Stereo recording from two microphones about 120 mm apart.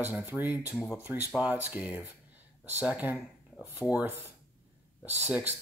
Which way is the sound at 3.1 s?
20° left (ahead or behind).